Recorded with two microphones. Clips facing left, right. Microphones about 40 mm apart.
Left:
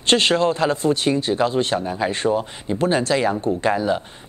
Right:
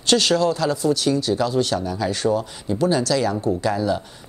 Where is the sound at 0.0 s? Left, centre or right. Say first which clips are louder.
Left 1 dB; left.